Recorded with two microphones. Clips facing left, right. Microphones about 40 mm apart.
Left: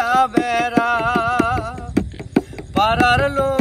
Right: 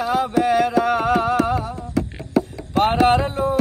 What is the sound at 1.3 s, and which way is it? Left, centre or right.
Singing, left.